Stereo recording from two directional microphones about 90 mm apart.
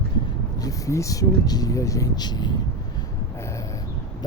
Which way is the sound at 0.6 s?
40° left (ahead or behind).